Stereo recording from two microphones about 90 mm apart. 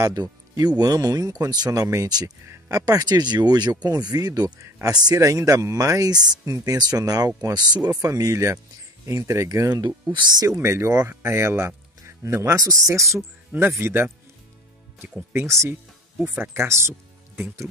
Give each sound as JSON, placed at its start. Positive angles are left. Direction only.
{"t": 0.0, "sound": "speech", "side_deg": -45}
{"t": 5.2, "sound": "speech", "side_deg": -35}
{"t": 9.7, "sound": "speech", "side_deg": -50}
{"t": 10.4, "sound": "speech", "side_deg": -30}
{"t": 15.3, "sound": "speech", "side_deg": -30}